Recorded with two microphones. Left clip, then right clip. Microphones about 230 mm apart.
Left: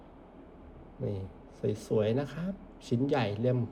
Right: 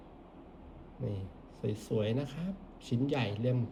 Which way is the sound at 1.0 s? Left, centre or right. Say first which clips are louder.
Left 5 dB; centre.